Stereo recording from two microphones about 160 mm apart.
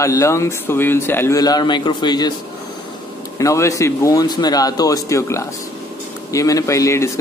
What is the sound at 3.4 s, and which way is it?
A man's voice, 20° left (ahead or behind).